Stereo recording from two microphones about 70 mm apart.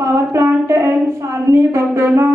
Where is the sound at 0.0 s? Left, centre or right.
Right.